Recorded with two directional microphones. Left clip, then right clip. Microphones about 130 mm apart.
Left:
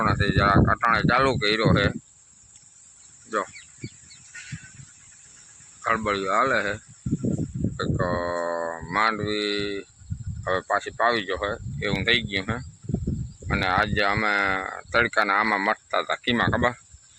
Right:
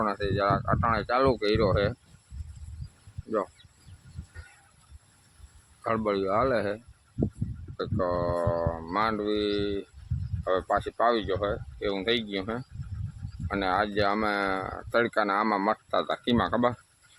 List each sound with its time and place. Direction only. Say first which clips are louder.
0.0 s speech: left 5 dB; 5° right (ahead or behind)
0.6 s speech: left 6 dB; 5° left (ahead or behind)
0.9 s speech: left 2 dB; 5° right (ahead or behind)
5.8 s speech: left 3 dB; 15° right (ahead or behind)
7.8 s speech: left 2 dB; 5° left (ahead or behind); by 16.7 s 15° right (ahead or behind)